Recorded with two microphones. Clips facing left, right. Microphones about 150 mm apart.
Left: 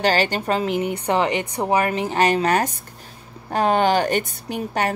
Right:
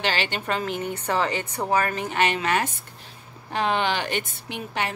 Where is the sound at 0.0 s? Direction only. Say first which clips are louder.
Left 7 dB; 40° left (ahead or behind).